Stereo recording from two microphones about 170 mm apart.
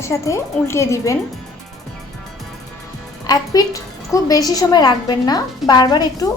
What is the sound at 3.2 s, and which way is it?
A woman's voice, 20° left (ahead or behind).